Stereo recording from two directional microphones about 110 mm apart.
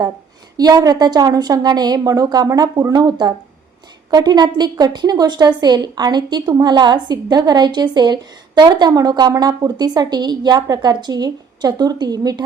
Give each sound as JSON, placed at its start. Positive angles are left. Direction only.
{"t": 0.5, "sound": "a woman's voice", "side_deg": -35}